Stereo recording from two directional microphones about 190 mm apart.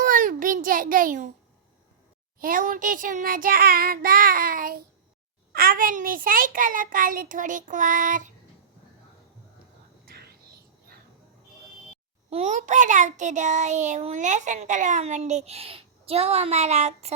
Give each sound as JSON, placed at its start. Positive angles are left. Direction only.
{"t": 0.0, "sound": "a sound", "side_deg": -45}
{"t": 2.4, "sound": "a child's voice", "side_deg": -45}
{"t": 10.1, "sound": "whispering", "side_deg": -55}
{"t": 12.3, "sound": "child singing", "side_deg": -35}